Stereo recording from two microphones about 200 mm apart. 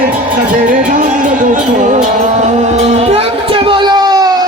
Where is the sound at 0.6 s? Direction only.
45° right (ahead or behind).